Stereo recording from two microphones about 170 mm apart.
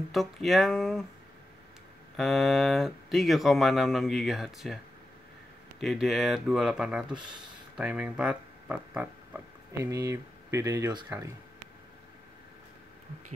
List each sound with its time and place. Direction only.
0.1 s speech: centre (ahead or behind)
2.1 s speech: centre (ahead or behind)
5.8 s speech: centre (ahead or behind); by 11.3 s 20° right (ahead or behind)